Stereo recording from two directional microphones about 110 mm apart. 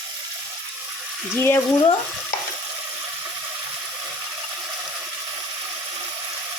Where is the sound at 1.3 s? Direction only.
20° left (ahead or behind).